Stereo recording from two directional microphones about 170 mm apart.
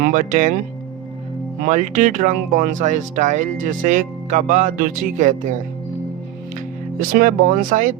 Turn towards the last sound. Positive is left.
turn(degrees=-50)  # may be behind; listen again after turning